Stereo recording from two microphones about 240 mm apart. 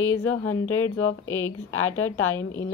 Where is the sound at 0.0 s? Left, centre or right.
Left.